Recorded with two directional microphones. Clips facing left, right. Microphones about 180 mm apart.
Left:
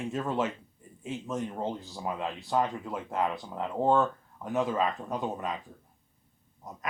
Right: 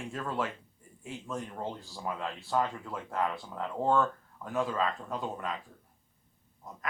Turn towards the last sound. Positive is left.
turn(degrees=20)  # may be behind; listen again after turning